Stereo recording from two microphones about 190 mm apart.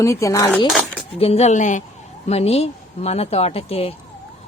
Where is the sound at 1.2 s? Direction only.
35° left (ahead or behind).